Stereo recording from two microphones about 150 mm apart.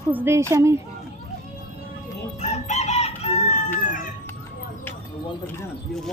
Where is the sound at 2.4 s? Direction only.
50° left (ahead or behind).